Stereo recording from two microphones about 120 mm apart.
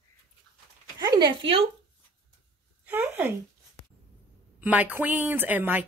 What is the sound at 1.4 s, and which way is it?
Speech, 55° right (ahead or behind).